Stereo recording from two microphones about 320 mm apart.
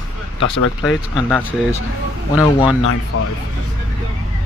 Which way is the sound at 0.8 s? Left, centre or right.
Centre.